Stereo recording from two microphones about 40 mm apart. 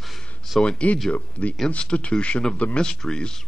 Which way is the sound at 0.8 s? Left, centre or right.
Left.